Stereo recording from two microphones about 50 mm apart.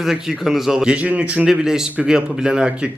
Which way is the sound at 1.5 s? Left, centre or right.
Centre.